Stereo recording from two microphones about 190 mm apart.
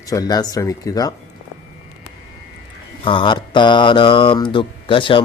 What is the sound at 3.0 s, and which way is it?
Mantra, 25° left (ahead or behind).